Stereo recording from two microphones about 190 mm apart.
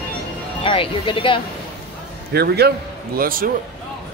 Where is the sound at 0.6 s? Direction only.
25° left (ahead or behind).